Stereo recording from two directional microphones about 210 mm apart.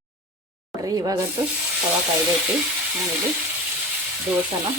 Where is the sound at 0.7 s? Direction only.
15° right (ahead or behind).